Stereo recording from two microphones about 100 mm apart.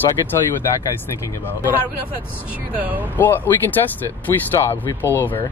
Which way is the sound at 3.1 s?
20° left (ahead or behind).